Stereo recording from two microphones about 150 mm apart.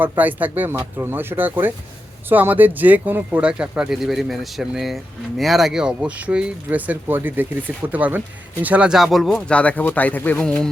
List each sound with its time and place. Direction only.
0.0 s speech: 10° right (ahead or behind); by 10.7 s 5° left (ahead or behind)